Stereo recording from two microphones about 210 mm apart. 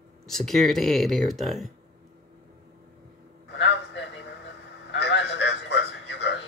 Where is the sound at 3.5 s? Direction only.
60° left (ahead or behind).